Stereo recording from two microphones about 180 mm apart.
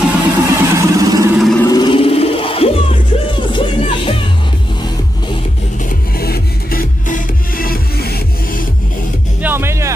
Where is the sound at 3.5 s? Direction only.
30° left (ahead or behind).